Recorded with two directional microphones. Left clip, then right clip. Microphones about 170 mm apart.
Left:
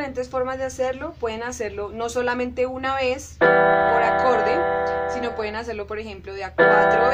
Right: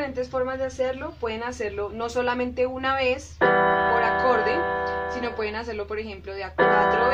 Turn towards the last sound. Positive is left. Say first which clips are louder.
# left 4 dB
turn(degrees=55)  # may be behind; listen again after turning